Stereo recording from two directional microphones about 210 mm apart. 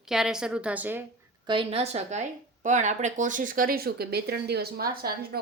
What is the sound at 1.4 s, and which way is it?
A woman's voice, 25° right (ahead or behind).